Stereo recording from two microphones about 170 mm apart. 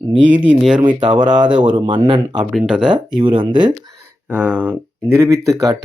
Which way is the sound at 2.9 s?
30° right (ahead or behind).